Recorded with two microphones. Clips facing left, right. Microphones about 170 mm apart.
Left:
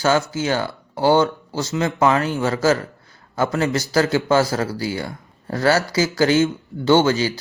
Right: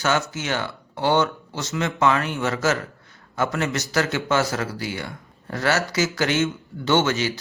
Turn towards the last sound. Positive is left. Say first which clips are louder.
# left 5 dB
turn(degrees=35)  # may be behind; listen again after turning